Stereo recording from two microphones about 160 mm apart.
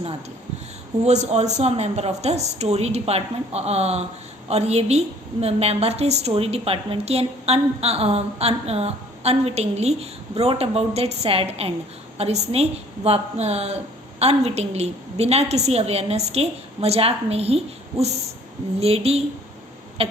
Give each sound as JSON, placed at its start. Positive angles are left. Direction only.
{"t": 1.0, "sound": "a woman's voice", "side_deg": -45}
{"t": 18.8, "sound": "a woman's voice", "side_deg": -40}
{"t": 20.0, "sound": "a sound", "side_deg": -35}